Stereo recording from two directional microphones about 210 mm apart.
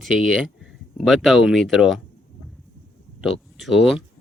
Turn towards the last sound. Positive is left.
turn(degrees=0)  # may be behind; listen again after turning